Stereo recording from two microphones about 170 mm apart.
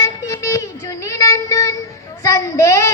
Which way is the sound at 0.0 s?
20° left (ahead or behind).